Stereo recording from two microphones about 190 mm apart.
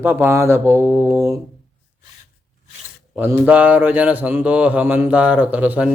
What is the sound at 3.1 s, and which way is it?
Speech, 10° right (ahead or behind).